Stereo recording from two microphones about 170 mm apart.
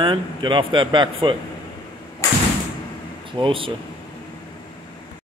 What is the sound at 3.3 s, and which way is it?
Speech, 30° right (ahead or behind).